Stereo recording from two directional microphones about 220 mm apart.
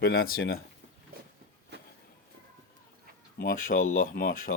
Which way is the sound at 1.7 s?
50° right (ahead or behind).